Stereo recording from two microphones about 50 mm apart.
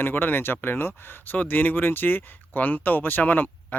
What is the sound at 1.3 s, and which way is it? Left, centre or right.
Speech, left.